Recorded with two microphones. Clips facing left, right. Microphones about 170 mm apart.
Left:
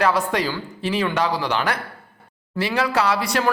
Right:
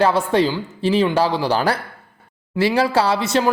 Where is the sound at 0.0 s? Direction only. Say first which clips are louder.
Right 4 dB; 30° right (ahead or behind).